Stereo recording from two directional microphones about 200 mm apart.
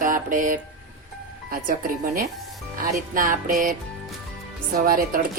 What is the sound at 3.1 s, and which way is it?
Speech, 45° right (ahead or behind).